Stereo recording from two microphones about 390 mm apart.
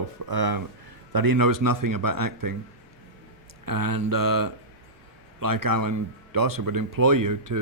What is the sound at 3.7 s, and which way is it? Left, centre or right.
Speech, right.